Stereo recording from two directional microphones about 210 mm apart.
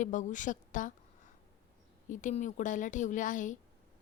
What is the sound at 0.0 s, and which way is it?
Speech, 35° left (ahead or behind).